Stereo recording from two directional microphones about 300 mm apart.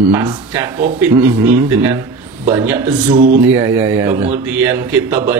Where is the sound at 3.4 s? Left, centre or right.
Centre.